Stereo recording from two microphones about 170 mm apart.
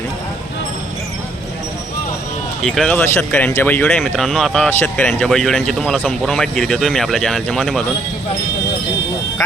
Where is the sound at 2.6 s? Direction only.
5° left (ahead or behind).